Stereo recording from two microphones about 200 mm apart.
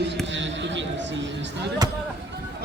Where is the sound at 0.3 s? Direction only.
65° right (ahead or behind).